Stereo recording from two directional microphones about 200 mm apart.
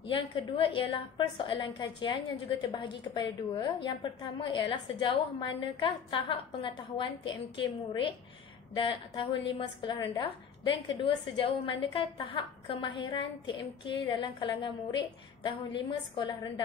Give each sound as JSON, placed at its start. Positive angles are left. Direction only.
{"t": 0.1, "sound": "a woman's voice", "side_deg": 25}